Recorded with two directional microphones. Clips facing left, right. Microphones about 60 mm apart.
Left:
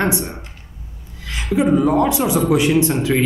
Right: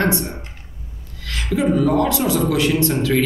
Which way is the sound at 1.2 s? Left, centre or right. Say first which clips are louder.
Left 2 dB; centre.